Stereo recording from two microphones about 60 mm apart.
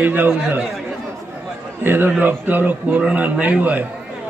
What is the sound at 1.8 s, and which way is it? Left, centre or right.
A man's voice, right.